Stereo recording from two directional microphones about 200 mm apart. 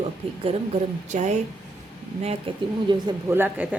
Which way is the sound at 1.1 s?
40° right (ahead or behind).